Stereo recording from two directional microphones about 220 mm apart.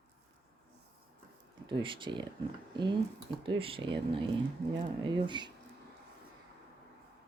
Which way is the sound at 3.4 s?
25° right (ahead or behind).